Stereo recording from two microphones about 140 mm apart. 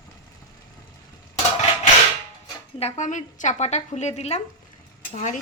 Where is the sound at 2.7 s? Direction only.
50° left (ahead or behind).